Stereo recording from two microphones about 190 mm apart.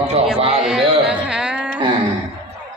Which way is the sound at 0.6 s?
5° right (ahead or behind).